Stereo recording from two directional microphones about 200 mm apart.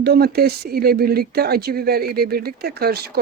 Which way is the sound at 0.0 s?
50° right (ahead or behind).